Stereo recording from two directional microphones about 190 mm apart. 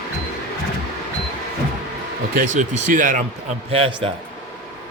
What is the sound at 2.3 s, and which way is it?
Speech, 40° right (ahead or behind).